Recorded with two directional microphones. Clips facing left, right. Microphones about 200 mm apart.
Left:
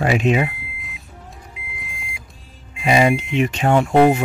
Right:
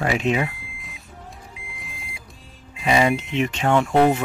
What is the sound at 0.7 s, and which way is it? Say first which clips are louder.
Vehicle: left 2 dB; centre (ahead or behind).